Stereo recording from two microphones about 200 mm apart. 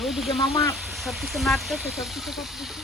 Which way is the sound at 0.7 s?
Centre (ahead or behind).